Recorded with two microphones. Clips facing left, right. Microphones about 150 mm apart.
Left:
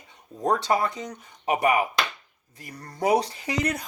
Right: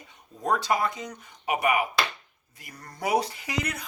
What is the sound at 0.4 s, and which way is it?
Speech, 35° left (ahead or behind).